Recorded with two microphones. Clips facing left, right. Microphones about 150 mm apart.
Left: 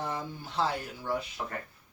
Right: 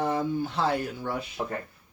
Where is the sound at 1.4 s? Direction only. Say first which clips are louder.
Right 6 dB; 35° right (ahead or behind).